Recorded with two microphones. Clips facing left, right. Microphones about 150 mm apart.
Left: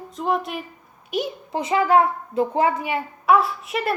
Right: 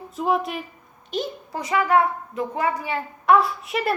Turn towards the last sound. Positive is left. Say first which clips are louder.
# even
turn(degrees=0)  # may be behind; listen again after turning